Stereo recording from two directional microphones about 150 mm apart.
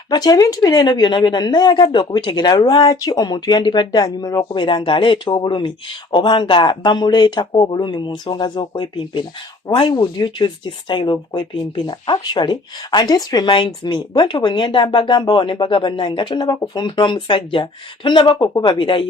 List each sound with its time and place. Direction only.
0.1 s speech: 25° left (ahead or behind)